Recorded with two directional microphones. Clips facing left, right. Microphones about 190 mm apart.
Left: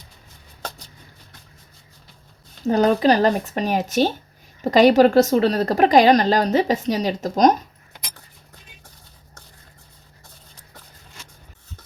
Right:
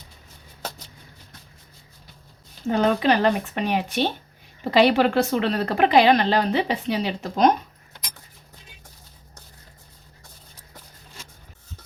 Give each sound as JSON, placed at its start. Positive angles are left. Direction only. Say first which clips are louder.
{"t": 2.6, "sound": "a woman's voice", "louder": "left 4 dB", "side_deg": 40}